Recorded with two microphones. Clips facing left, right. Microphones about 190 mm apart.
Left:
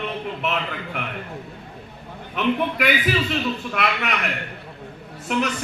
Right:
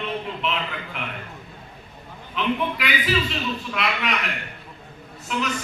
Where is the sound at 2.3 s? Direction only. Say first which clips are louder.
Left 3 dB; 50° left (ahead or behind).